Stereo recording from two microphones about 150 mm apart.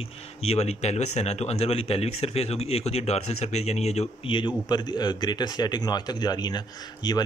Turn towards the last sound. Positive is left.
turn(degrees=30)  # may be behind; listen again after turning